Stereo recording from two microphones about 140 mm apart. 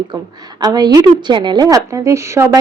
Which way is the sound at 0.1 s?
30° right (ahead or behind).